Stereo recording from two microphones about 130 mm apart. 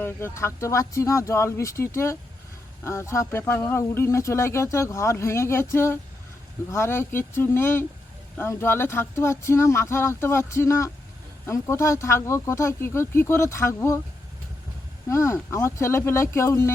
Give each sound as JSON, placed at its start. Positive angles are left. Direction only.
{"t": 0.0, "sound": "speech", "side_deg": 15}
{"t": 15.1, "sound": "speech", "side_deg": 20}